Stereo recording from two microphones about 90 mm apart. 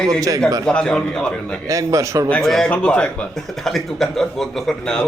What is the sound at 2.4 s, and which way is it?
A man's voice, centre (ahead or behind).